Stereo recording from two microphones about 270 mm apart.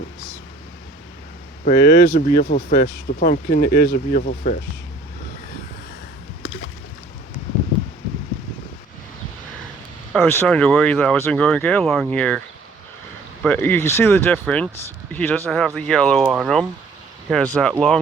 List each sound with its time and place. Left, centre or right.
1.6 s speech: left
10.1 s speech: centre
13.4 s speech: centre